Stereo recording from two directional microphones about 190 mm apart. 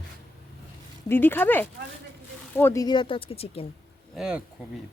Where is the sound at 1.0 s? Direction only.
10° left (ahead or behind); by 3.7 s 30° left (ahead or behind).